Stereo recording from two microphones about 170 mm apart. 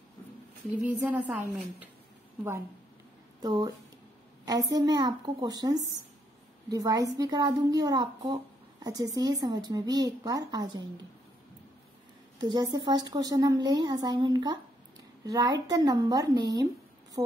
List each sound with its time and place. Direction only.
0.8 s a woman's voice: 10° right (ahead or behind)
3.4 s a woman's voice: 20° right (ahead or behind)
12.4 s a woman's voice: 25° right (ahead or behind)